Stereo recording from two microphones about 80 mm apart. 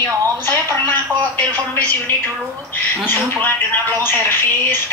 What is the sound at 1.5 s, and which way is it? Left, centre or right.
A woman's voice, left.